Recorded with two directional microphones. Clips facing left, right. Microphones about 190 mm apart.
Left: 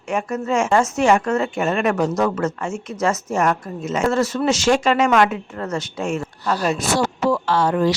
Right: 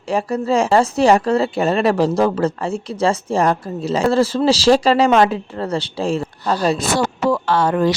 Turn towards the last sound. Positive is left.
turn(degrees=-55)  # may be behind; listen again after turning